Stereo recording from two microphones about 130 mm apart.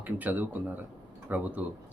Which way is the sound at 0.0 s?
15° right (ahead or behind).